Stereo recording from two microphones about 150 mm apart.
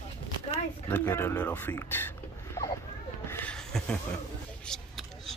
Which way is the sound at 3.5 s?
5° left (ahead or behind).